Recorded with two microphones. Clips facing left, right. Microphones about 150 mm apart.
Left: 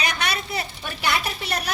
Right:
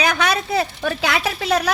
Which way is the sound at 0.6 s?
90° right.